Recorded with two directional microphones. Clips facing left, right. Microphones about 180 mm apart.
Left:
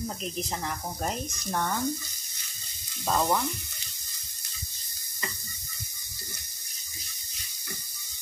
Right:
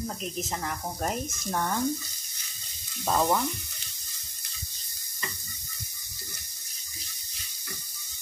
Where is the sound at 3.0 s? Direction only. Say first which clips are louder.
Right 1 dB; 5° right (ahead or behind).